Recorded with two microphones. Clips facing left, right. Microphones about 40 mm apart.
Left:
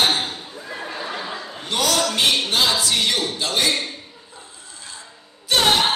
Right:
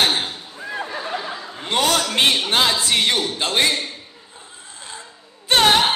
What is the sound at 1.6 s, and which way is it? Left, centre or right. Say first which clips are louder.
A man's voice: right 2 dB; right.